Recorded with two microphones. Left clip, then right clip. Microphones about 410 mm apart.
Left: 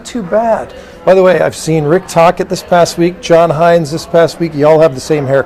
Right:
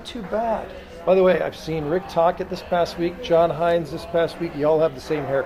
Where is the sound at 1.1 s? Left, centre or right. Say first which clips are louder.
Left 10 dB; left.